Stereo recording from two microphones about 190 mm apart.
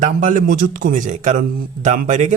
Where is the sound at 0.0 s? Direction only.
40° right (ahead or behind).